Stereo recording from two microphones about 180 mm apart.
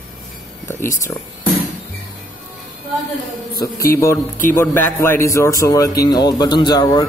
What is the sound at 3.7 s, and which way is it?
Speech, 15° left (ahead or behind).